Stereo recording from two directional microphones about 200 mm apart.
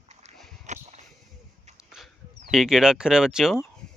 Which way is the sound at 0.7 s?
35° right (ahead or behind).